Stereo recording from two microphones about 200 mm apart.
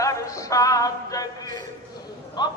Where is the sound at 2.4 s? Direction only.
20° left (ahead or behind).